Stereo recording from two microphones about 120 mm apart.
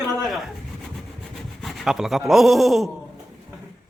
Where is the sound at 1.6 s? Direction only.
Centre (ahead or behind).